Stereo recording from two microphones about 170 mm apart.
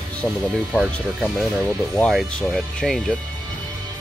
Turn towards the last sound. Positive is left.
turn(degrees=0)  # may be behind; listen again after turning